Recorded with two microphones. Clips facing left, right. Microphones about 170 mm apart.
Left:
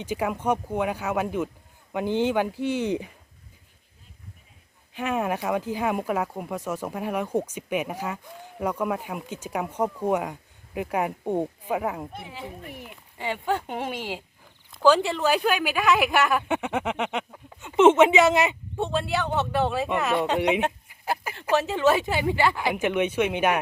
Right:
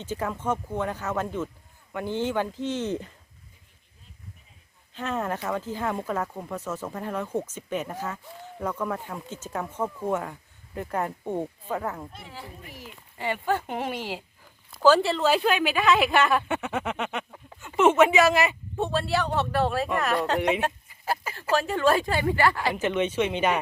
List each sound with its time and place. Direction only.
0.0 s speech: 10° left (ahead or behind)
4.9 s speech: 10° left (ahead or behind)
12.6 s speech: 60° left (ahead or behind)
13.1 s speech: 15° left (ahead or behind)
13.7 s speech: 10° right (ahead or behind)
16.5 s speech: 15° left (ahead or behind)
19.1 s speech: centre (ahead or behind)
20.3 s speech: 20° left (ahead or behind)
21.7 s speech: centre (ahead or behind)
22.3 s speech: 15° left (ahead or behind)